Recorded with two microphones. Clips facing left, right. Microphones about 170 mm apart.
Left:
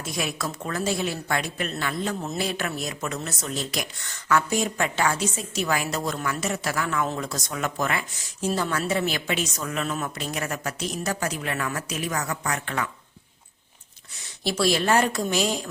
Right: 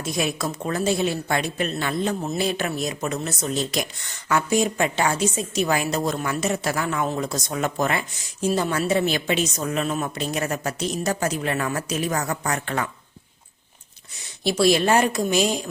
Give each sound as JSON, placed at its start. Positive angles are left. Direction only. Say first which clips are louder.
{"t": 0.0, "sound": "a woman's voice", "louder": "right 4 dB", "side_deg": -20}
{"t": 8.4, "sound": "a woman's voice", "louder": "right 3 dB", "side_deg": -15}
{"t": 14.6, "sound": "speech", "louder": "right 3 dB", "side_deg": -20}